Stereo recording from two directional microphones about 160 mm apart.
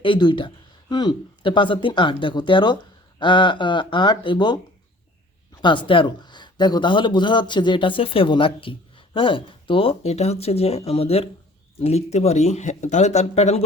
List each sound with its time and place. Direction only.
0.0 s speech: 30° left (ahead or behind)
5.6 s speech: 30° left (ahead or behind)